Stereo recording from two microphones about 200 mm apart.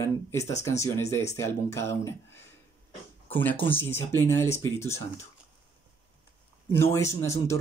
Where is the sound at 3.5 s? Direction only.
25° left (ahead or behind).